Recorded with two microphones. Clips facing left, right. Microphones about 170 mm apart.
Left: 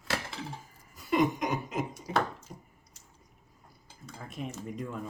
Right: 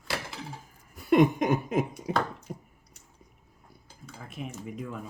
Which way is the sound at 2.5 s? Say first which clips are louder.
Right 7 dB; 55° right (ahead or behind).